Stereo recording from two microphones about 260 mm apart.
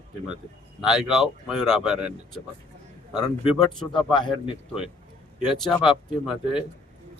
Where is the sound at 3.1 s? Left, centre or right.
Centre.